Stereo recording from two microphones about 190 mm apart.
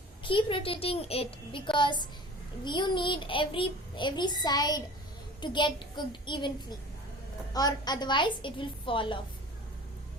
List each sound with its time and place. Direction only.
0.2 s a child's voice: 25° left (ahead or behind)